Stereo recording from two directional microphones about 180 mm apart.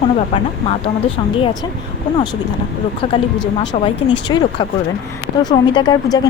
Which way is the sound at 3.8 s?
25° left (ahead or behind).